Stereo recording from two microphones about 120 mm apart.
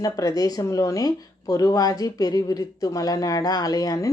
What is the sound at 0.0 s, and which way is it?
A woman's voice, 30° left (ahead or behind).